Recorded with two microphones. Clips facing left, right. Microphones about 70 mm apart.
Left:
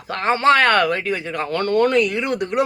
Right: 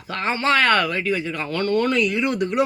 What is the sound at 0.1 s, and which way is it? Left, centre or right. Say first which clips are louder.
Speech: left 5 dB; left.